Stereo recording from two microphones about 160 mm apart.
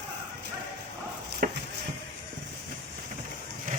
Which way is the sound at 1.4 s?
70° right (ahead or behind).